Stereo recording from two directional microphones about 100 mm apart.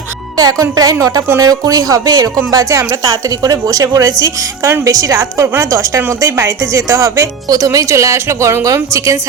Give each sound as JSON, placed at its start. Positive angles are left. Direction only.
{"t": 0.3, "sound": "a woman's voice", "side_deg": -40}